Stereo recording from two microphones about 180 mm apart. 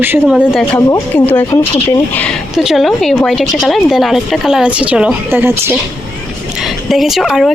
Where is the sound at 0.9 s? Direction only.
10° left (ahead or behind).